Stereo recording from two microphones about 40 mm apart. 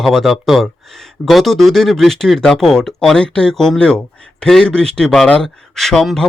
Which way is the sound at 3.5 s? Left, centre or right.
Centre.